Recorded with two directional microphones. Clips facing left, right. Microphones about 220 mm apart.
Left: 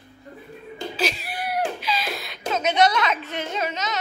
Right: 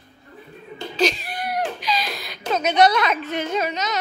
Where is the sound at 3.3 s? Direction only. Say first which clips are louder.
Right 5 dB; 45° right (ahead or behind).